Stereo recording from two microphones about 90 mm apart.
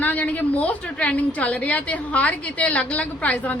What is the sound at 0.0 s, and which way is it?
A woman's voice, 15° left (ahead or behind).